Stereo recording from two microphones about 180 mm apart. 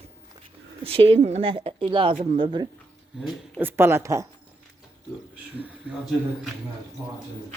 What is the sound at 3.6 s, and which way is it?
Speech, 10° right (ahead or behind).